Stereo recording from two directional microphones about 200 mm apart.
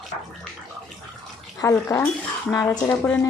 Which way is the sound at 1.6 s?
15° left (ahead or behind).